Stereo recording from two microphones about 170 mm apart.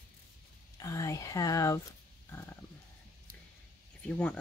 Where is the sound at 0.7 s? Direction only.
15° left (ahead or behind).